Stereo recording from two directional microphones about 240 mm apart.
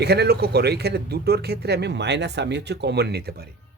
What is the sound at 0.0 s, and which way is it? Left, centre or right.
Speech, right.